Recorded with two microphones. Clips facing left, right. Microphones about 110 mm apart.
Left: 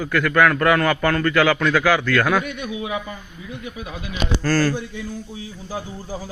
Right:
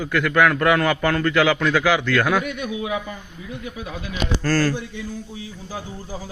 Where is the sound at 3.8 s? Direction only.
10° left (ahead or behind).